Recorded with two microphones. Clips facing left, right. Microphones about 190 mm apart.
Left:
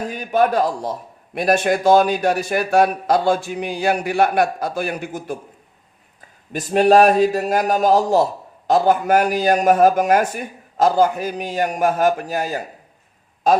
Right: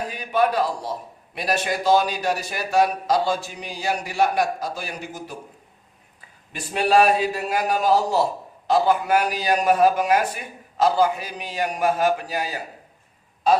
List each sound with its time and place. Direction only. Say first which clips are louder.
0.1 s a man's voice: left 4 dB; 45° left (ahead or behind)
6.5 s a man's voice: left 6 dB; 45° left (ahead or behind)